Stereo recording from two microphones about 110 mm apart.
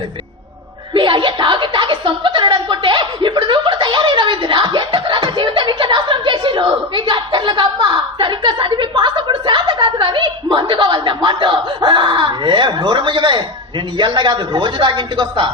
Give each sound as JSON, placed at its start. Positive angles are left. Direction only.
{"t": 0.9, "sound": "chuckle", "side_deg": -50}
{"t": 14.0, "sound": "speech", "side_deg": -45}